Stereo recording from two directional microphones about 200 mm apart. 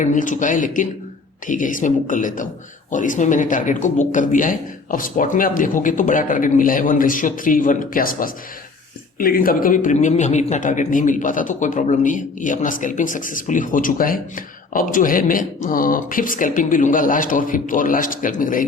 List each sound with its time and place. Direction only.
0.0 s a man's voice: 40° left (ahead or behind)